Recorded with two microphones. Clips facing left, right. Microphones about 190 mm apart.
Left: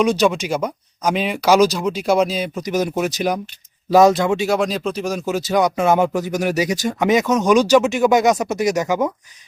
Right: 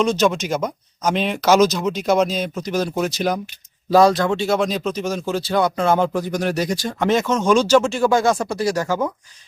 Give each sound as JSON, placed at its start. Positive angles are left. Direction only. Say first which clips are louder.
{"t": 0.0, "sound": "speech", "louder": "left 1 dB", "side_deg": 15}
{"t": 3.9, "sound": "speech", "louder": "left 2 dB", "side_deg": 20}